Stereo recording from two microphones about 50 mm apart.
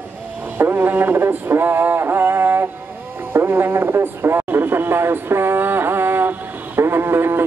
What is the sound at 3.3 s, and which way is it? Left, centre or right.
Speech, right.